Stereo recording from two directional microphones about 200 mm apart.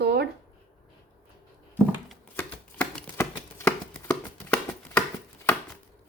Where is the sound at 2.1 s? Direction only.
5° left (ahead or behind).